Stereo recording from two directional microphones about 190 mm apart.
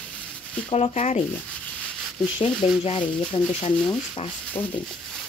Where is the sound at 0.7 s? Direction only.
35° left (ahead or behind).